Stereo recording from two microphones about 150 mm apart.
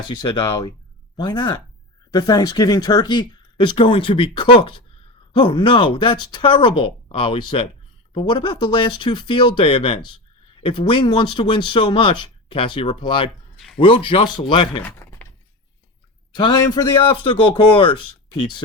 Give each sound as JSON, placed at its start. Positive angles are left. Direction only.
{"t": 0.2, "sound": "speech", "side_deg": 30}
{"t": 14.8, "sound": "a sound", "side_deg": 15}
{"t": 16.3, "sound": "speech", "side_deg": 25}